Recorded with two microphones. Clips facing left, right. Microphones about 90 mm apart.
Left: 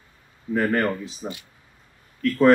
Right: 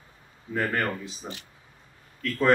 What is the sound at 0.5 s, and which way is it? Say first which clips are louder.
Speech: left 5 dB; 5° left (ahead or behind).